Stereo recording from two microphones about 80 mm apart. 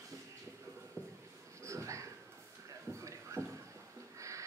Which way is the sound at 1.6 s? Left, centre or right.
Right.